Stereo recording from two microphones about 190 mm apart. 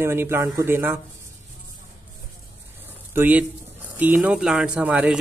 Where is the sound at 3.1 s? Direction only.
10° right (ahead or behind).